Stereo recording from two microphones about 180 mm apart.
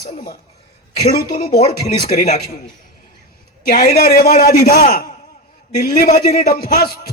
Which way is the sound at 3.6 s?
50° left (ahead or behind).